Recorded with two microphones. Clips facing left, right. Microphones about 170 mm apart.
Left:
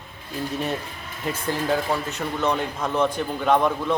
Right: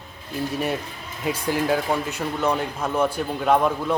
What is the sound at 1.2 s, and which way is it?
Speech, 10° right (ahead or behind).